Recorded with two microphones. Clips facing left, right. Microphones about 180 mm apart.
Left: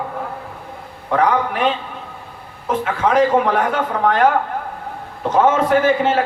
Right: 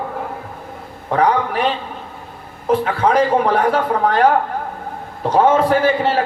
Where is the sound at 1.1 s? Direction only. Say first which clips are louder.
Right 1 dB; 35° right (ahead or behind).